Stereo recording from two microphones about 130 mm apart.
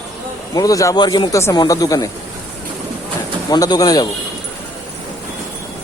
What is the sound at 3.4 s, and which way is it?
Speech, 30° left (ahead or behind).